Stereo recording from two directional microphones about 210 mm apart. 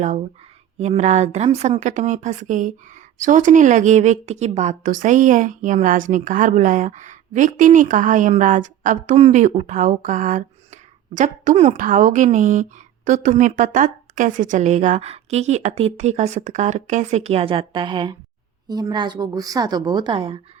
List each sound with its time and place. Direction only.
0.8 s a woman's voice: 35° right (ahead or behind)